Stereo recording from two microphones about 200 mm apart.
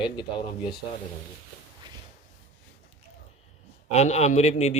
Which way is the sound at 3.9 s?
35° left (ahead or behind).